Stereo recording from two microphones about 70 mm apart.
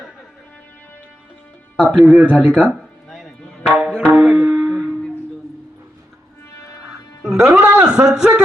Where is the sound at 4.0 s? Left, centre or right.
Right.